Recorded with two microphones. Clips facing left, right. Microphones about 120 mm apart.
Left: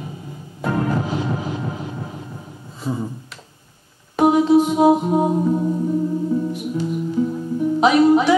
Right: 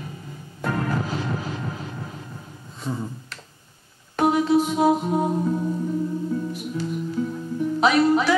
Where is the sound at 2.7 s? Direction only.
5° left (ahead or behind).